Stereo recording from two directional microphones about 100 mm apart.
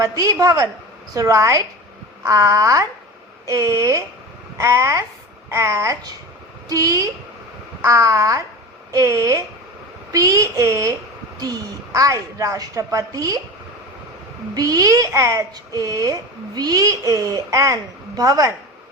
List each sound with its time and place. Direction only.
0.0 s a woman's voice: 35° right (ahead or behind)
14.5 s a woman's voice: 40° right (ahead or behind)